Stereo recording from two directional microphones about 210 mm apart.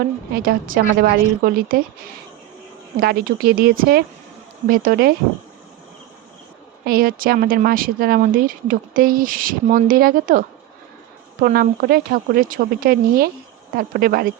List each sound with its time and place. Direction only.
0.0 s speech: 45° right (ahead or behind)
3.0 s speech: 45° right (ahead or behind)
6.8 s speech: 45° right (ahead or behind)